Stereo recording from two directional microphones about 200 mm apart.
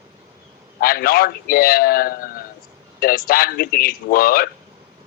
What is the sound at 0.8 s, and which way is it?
A man's voice, 50° left (ahead or behind).